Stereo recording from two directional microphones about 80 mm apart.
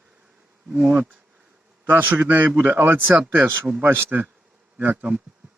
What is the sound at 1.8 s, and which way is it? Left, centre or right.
A man's voice, right.